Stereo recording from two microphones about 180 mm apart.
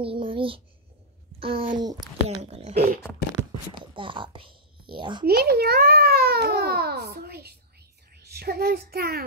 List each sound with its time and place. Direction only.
0.0 s a child's voice: 30° right (ahead or behind)
2.5 s speech: 35° right (ahead or behind)
5.2 s a child's voice: 60° right (ahead or behind)